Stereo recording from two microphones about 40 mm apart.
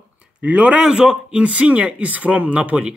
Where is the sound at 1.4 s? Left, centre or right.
Right.